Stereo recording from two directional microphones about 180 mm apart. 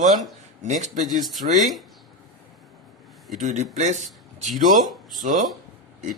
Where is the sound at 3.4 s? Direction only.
40° right (ahead or behind).